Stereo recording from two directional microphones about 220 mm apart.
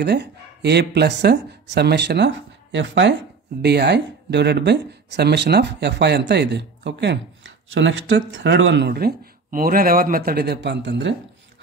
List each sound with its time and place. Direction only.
0.0 s speech: 50° right (ahead or behind)